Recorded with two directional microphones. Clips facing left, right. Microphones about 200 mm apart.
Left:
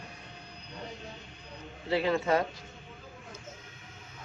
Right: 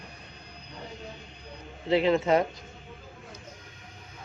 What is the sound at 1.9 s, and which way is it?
Speech, 20° right (ahead or behind).